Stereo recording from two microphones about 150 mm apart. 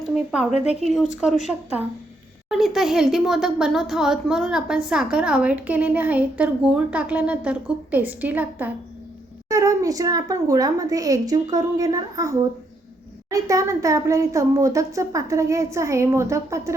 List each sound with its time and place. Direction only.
0.5 s speech: 45° left (ahead or behind)
0.9 s speech: 5° right (ahead or behind)
9.5 s speech: 20° right (ahead or behind)
13.3 s speech: 20° right (ahead or behind)